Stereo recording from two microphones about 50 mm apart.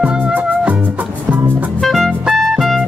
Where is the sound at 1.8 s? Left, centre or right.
Centre.